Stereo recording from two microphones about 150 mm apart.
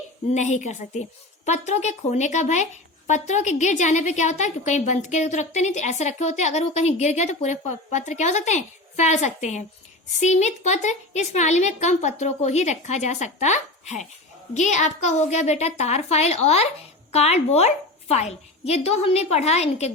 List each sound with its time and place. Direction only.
0.3 s a woman's voice: 50° left (ahead or behind)